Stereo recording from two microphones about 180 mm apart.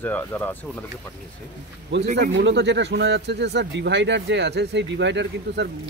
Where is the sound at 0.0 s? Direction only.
10° left (ahead or behind).